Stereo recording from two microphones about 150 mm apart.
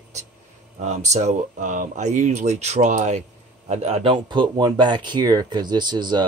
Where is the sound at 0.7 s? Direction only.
50° right (ahead or behind).